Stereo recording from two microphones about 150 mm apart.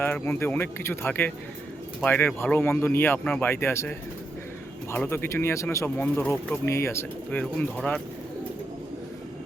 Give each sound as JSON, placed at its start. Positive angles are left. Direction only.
{"t": 0.0, "sound": "speech", "side_deg": 15}